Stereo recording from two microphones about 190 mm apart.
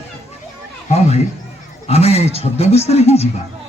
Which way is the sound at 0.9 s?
35° left (ahead or behind).